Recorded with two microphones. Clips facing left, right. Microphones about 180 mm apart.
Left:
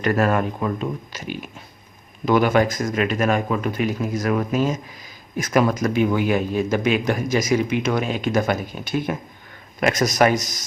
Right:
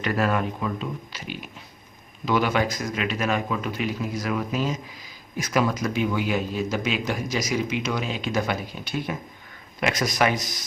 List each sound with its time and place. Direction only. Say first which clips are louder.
0.0 s speech: left 4 dB; 45° left (ahead or behind)